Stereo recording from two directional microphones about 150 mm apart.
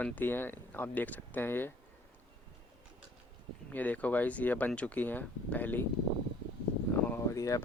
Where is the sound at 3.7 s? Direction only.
10° left (ahead or behind).